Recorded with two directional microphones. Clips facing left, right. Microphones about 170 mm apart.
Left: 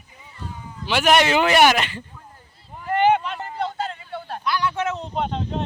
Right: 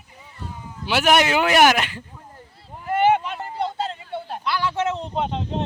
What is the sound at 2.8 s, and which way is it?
Vehicle, 5° right (ahead or behind).